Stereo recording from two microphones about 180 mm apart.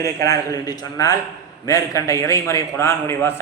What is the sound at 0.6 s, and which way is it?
A man's voice, 20° left (ahead or behind).